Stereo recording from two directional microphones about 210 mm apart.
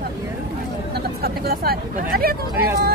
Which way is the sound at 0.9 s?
50° right (ahead or behind).